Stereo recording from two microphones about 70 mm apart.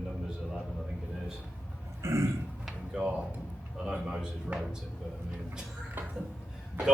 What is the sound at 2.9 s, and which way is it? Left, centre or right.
Speech, centre.